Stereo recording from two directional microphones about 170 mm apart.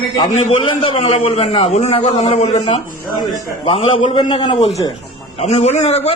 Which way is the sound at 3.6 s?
35° left (ahead or behind).